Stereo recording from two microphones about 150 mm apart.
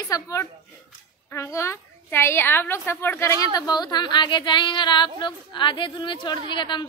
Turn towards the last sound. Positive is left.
turn(degrees=30)  # may be behind; listen again after turning